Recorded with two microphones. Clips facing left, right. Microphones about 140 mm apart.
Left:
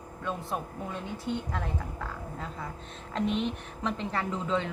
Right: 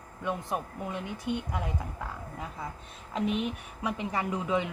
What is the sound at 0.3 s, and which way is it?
A woman's voice, 15° right (ahead or behind).